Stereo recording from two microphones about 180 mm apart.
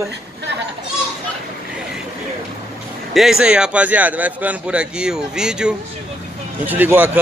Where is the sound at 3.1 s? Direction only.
Centre (ahead or behind).